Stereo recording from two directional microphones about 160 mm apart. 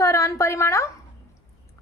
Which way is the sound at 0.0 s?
20° left (ahead or behind).